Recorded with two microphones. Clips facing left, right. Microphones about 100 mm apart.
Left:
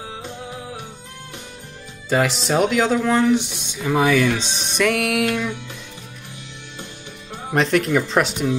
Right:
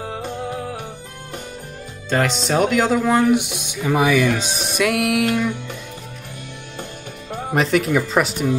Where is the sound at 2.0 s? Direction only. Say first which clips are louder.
Even; 5° left (ahead or behind).